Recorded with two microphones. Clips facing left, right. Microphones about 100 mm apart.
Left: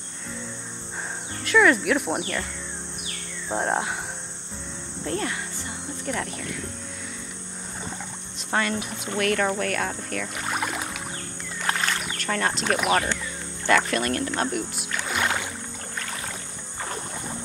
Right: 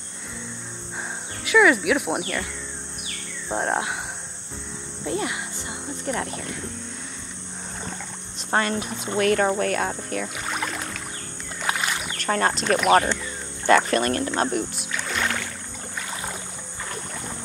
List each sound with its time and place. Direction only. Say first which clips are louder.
1.4 s speech: right 1 dB; 5° right (ahead or behind)
3.4 s speech: right 1 dB; centre (ahead or behind)
5.0 s cricket: right 1 dB; 10° right (ahead or behind)
6.0 s speech: right 2 dB; 35° right (ahead or behind)
8.5 s speech: right 2 dB; 35° right (ahead or behind); by 10.3 s 20° right (ahead or behind)
10.3 s rowboat: left 1 dB; 5° left (ahead or behind)
11.6 s rowboat: even; 10° right (ahead or behind)
12.3 s speech: right 4 dB; 35° right (ahead or behind)
12.6 s speech: right 3 dB; 5° left (ahead or behind)
13.7 s speech: right 3 dB; 35° right (ahead or behind)
15.0 s rowboat: left 1 dB; 15° left (ahead or behind)
16.0 s rowboat: right 2 dB; 15° right (ahead or behind)